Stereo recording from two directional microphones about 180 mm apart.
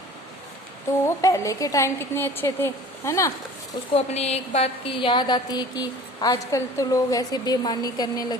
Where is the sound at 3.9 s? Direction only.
35° left (ahead or behind).